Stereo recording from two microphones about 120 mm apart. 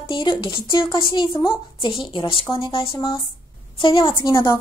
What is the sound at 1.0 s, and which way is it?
Speech, 45° left (ahead or behind).